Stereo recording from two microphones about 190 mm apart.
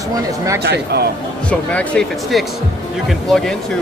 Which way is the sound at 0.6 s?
60° right (ahead or behind).